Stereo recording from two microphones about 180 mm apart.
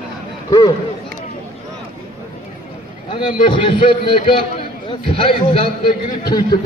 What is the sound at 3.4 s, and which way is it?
A man's voice, 25° left (ahead or behind).